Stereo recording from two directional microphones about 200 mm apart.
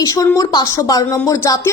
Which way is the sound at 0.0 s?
15° left (ahead or behind).